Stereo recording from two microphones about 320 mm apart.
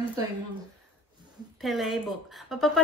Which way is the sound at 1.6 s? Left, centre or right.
Centre.